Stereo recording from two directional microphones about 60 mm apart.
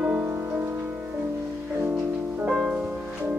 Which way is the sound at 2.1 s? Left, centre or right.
Right.